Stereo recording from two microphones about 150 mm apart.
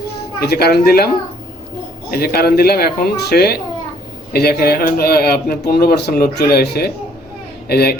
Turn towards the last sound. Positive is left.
turn(degrees=90)